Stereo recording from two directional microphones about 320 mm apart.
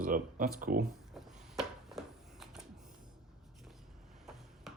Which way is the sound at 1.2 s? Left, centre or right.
Centre.